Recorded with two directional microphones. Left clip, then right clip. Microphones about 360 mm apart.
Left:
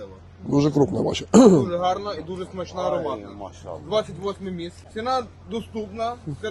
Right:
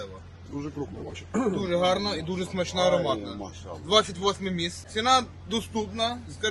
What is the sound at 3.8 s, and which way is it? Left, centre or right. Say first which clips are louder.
A man's voice: right 2 dB; right.